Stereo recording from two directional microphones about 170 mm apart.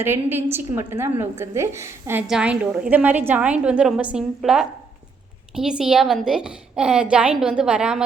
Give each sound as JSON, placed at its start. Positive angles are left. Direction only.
{"t": 0.0, "sound": "a woman's voice", "side_deg": -15}